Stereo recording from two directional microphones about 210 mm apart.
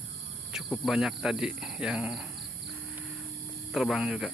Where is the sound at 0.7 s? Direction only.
Centre (ahead or behind).